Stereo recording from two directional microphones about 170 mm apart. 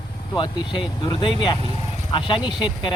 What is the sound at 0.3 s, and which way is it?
A man's voice, 25° left (ahead or behind).